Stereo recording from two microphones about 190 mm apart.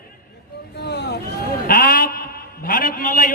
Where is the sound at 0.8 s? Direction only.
60° left (ahead or behind).